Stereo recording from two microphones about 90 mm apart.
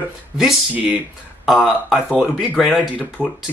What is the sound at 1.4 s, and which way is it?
Speech, centre (ahead or behind).